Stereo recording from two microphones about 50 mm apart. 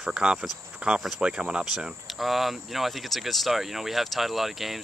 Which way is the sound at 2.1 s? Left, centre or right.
Centre.